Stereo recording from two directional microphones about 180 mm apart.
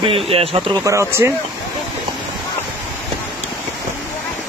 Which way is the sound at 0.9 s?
15° right (ahead or behind).